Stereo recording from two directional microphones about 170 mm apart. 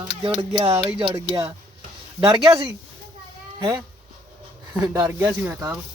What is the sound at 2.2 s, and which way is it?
Speech, 30° right (ahead or behind).